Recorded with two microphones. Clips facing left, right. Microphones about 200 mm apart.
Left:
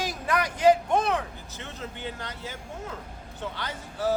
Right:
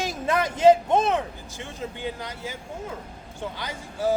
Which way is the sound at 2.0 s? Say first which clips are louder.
Right 4 dB; 10° right (ahead or behind).